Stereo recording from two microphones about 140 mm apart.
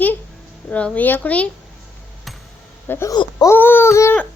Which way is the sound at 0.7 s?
10° left (ahead or behind).